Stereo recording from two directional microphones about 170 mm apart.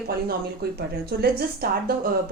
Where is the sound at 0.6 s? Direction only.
75° right (ahead or behind).